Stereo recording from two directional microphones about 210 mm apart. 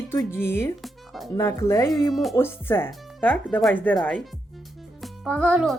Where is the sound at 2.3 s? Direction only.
10° left (ahead or behind).